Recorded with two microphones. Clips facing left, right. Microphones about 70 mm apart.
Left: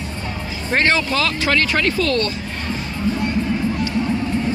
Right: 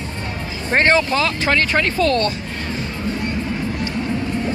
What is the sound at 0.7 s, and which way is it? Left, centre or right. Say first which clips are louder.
Speech: right 2 dB; right.